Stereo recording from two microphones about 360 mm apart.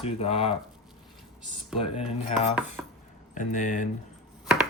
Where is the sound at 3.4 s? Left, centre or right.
Left.